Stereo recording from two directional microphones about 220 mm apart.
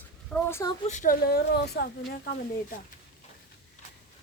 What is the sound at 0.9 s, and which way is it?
Speech, 35° left (ahead or behind).